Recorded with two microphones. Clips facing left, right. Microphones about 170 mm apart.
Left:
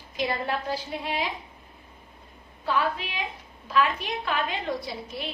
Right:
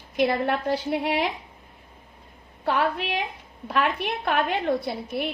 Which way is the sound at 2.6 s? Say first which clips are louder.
Right 3 dB; 70° right (ahead or behind).